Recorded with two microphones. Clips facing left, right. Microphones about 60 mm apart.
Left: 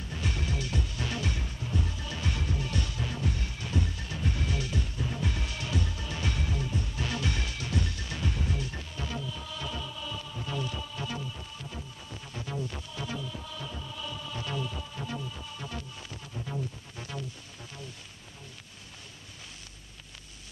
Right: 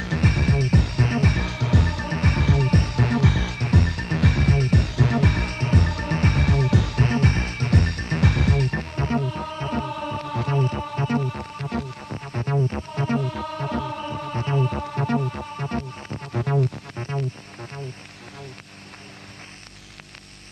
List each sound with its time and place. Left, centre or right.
0.2 s music: right
1.0 s music: right
1.4 s music: right
2.4 s music: right
2.7 s music: right
3.6 s music: right
7.0 s music: right
8.3 s music: right
10.5 s music: right
14.0 s music: right
16.3 s music: right